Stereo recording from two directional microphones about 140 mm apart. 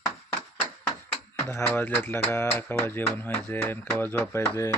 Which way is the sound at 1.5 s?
15° left (ahead or behind).